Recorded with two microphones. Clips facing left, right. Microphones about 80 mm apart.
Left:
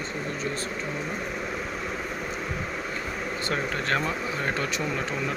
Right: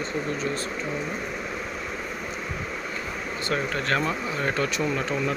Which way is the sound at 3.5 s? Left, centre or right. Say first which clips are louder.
Right 2 dB; left.